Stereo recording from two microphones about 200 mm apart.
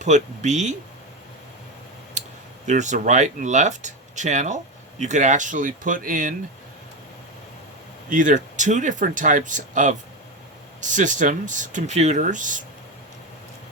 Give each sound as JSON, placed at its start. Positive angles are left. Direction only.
{"t": 0.0, "sound": "speech", "side_deg": -35}
{"t": 2.6, "sound": "speech", "side_deg": -35}
{"t": 8.1, "sound": "speech", "side_deg": -40}